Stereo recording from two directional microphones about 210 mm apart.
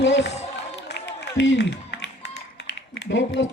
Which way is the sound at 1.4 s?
60° left (ahead or behind).